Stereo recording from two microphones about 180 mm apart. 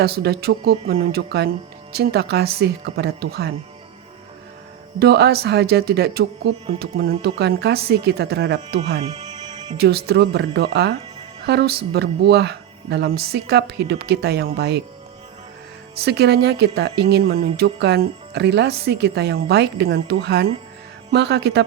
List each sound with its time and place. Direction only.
0.0 s speech: 65° right (ahead or behind)
4.9 s speech: 65° right (ahead or behind)
9.0 s music: 35° right (ahead or behind)
9.7 s speech: 60° right (ahead or behind)
16.0 s speech: 65° right (ahead or behind)